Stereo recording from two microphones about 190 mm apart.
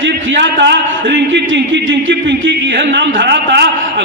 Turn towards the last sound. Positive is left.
turn(degrees=-60)  # may be behind; listen again after turning